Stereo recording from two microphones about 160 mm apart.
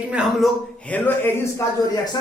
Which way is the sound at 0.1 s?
5° right (ahead or behind).